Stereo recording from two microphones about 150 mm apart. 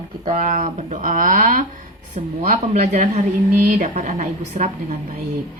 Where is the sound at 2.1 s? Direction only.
50° right (ahead or behind).